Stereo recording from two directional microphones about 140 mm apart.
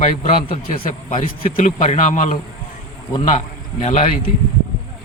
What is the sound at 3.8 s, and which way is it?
Speech, 55° left (ahead or behind).